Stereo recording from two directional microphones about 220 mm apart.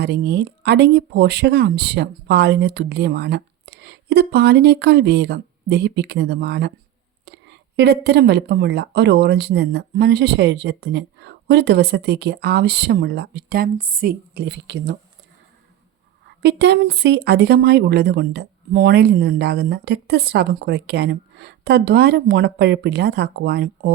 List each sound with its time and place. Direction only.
0.0 s a woman's voice: 50° right (ahead or behind)
16.2 s a woman's voice: 50° right (ahead or behind)